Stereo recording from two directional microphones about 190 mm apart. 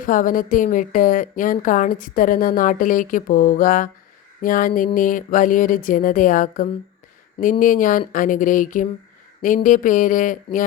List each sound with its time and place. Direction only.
0.0 s a woman's voice: 45° left (ahead or behind)